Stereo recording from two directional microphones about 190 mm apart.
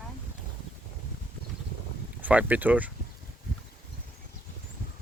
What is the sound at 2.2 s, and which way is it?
Speech, 10° right (ahead or behind).